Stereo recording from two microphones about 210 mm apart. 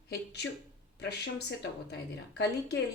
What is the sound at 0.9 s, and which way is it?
Speech, 55° left (ahead or behind).